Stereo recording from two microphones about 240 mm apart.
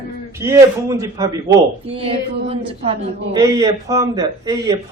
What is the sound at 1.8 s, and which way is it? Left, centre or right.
A man's voice, right.